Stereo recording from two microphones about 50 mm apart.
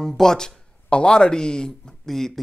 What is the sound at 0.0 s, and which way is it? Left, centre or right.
Speech, centre.